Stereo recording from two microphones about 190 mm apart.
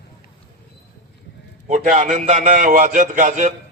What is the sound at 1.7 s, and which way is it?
A man's voice, 40° right (ahead or behind).